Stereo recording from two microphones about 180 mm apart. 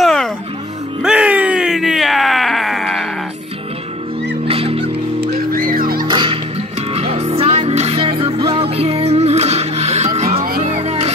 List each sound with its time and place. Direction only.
0.0 s music: centre (ahead or behind)
1.0 s a sound: 5° right (ahead or behind)
4.5 s music: 35° right (ahead or behind)
4.8 s music: 60° right (ahead or behind)
6.0 s music: 25° right (ahead or behind)